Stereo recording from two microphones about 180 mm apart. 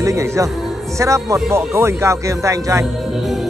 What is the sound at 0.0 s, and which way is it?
Speech, 15° right (ahead or behind).